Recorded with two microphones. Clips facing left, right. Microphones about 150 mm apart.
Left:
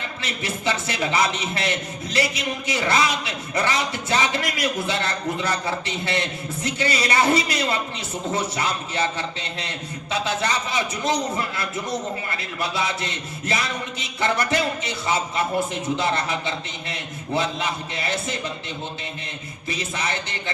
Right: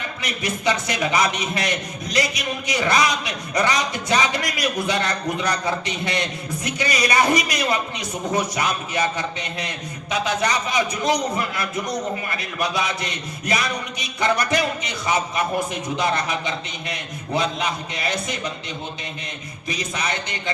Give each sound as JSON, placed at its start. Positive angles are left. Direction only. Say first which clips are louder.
{"t": 0.2, "sound": "a man's voice", "louder": "right 3 dB", "side_deg": -15}
{"t": 19.6, "sound": "a man's voice", "louder": "right 1 dB", "side_deg": -15}